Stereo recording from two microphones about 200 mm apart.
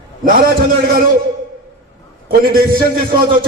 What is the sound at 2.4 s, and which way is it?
Speech, 45° right (ahead or behind).